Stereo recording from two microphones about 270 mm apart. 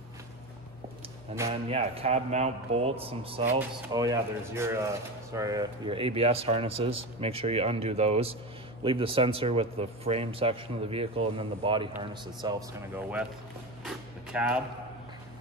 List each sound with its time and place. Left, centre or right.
1.3 s speech: centre
1.7 s speech: right; by 13.3 s centre
13.8 s a sound: centre